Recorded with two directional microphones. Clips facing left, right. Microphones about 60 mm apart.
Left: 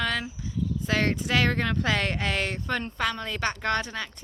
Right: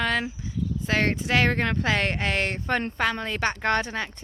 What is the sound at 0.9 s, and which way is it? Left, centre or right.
Speech, right.